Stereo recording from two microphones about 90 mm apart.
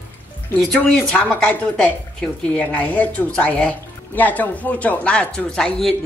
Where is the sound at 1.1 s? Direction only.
20° left (ahead or behind).